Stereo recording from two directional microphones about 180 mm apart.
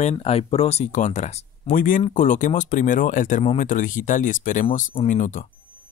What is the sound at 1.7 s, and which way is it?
Speech, 50° left (ahead or behind).